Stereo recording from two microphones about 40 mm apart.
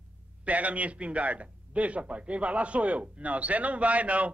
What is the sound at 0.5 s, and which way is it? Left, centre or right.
A man's voice, right.